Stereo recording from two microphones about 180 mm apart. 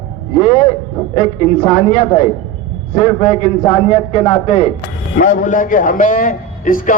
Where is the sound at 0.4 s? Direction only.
40° left (ahead or behind).